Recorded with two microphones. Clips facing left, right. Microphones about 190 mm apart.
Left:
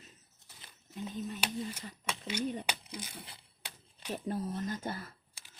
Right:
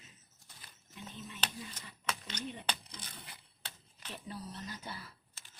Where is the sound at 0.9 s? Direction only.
45° left (ahead or behind).